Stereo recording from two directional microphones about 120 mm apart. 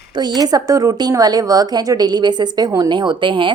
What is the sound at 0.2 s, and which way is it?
A woman's voice, 35° right (ahead or behind).